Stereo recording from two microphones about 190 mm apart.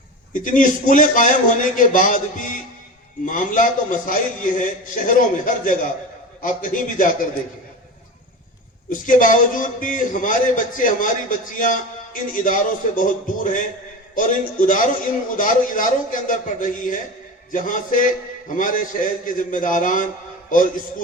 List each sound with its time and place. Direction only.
0.3 s a man's voice: 45° left (ahead or behind)
8.9 s a man's voice: 45° left (ahead or behind)